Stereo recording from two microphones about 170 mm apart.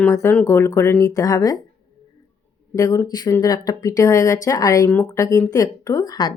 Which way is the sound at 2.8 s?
20° left (ahead or behind).